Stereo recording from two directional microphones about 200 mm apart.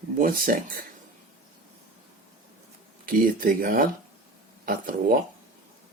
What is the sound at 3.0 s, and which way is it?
Speech, 45° right (ahead or behind).